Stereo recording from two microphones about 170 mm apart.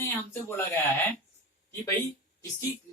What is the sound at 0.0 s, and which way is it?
Speech, 10° left (ahead or behind).